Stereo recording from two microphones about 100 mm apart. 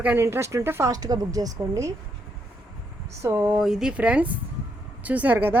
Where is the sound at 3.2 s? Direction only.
20° right (ahead or behind).